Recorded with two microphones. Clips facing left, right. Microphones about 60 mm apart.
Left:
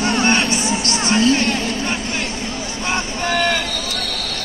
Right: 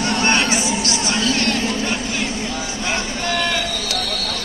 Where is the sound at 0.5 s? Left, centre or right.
Left.